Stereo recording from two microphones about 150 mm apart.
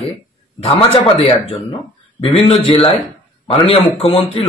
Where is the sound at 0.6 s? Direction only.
35° left (ahead or behind).